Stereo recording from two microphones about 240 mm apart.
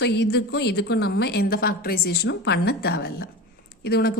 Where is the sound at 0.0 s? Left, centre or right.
Left.